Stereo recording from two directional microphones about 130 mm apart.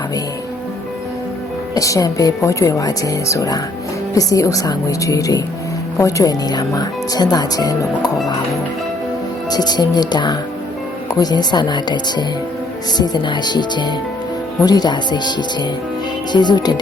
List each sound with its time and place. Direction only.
1.7 s speech: 25° left (ahead or behind)
9.5 s speech: 30° left (ahead or behind)